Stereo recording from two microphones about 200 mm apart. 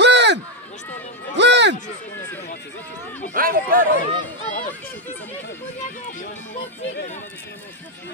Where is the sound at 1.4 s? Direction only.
60° right (ahead or behind).